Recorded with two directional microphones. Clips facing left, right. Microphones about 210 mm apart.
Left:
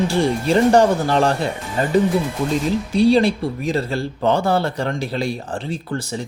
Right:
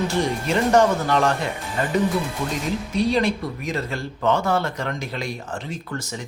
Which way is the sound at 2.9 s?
30° left (ahead or behind).